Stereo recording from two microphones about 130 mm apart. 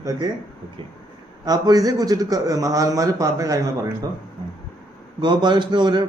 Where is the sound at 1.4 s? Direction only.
30° right (ahead or behind).